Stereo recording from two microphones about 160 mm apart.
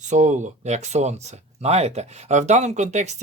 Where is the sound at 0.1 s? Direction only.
50° right (ahead or behind).